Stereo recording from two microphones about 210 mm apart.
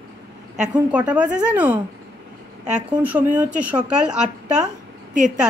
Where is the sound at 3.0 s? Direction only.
5° right (ahead or behind).